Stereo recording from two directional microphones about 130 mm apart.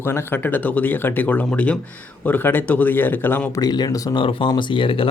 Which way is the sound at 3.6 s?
30° left (ahead or behind).